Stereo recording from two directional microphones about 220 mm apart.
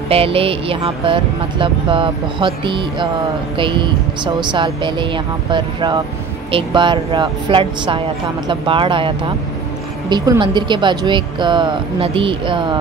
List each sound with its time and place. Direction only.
0.1 s speech: 25° right (ahead or behind)